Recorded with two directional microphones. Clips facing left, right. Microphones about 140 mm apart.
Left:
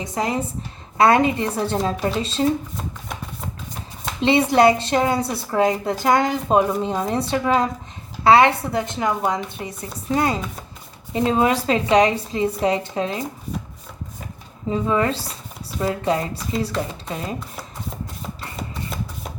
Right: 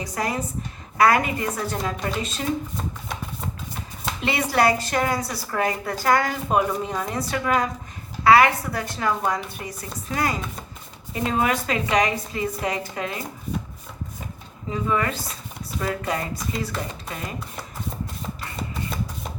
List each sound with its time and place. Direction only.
0.0 s a woman's voice: 25° left (ahead or behind)
4.2 s a woman's voice: 25° left (ahead or behind)
14.7 s a woman's voice: 30° left (ahead or behind)